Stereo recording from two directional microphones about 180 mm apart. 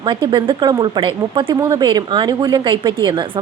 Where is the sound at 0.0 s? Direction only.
25° right (ahead or behind).